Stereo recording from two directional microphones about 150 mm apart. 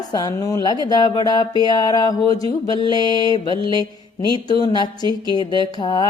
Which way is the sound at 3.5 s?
35° right (ahead or behind).